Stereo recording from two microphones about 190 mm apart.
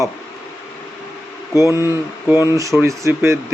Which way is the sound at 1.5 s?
15° right (ahead or behind).